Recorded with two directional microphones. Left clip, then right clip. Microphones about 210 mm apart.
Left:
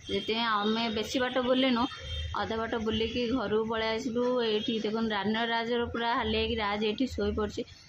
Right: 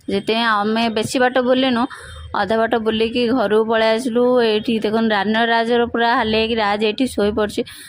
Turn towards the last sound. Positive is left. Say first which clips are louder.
# right 13 dB
turn(degrees=-45)  # may be behind; listen again after turning